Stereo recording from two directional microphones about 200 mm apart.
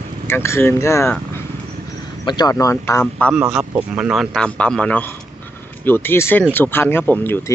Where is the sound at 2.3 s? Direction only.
20° left (ahead or behind).